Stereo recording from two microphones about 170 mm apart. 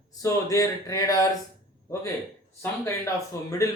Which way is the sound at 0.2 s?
20° left (ahead or behind).